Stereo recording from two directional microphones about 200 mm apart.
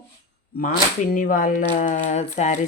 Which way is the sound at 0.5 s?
45° left (ahead or behind).